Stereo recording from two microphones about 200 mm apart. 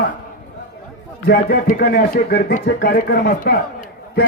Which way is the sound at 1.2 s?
50° left (ahead or behind).